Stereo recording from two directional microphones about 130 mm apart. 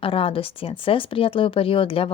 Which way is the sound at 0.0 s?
45° left (ahead or behind).